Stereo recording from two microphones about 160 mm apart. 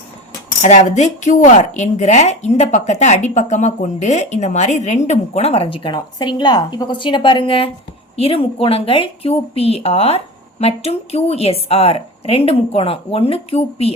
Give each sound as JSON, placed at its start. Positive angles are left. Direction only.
{"t": 0.6, "sound": "a woman's voice", "side_deg": 45}